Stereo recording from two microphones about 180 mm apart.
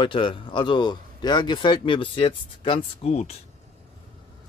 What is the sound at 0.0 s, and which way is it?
Speech, 30° left (ahead or behind).